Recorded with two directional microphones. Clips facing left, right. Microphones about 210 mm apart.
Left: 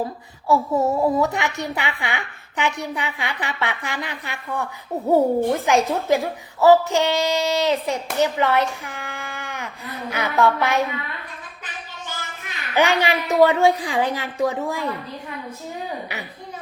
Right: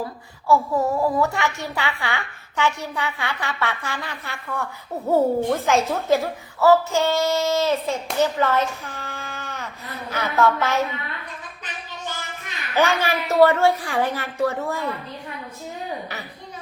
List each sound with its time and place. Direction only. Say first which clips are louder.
0.4 s a woman's voice: left 1 dB; 20° left (ahead or behind)
12.5 s a woman's voice: left 1 dB; 15° left (ahead or behind)